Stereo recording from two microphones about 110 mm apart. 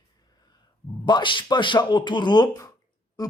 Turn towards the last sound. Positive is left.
turn(degrees=35)  # may be behind; listen again after turning